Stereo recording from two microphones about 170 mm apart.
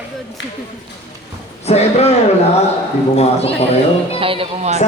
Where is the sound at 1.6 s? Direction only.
40° left (ahead or behind).